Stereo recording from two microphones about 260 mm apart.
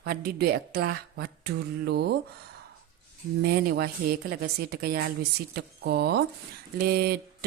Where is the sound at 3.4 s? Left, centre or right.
Right.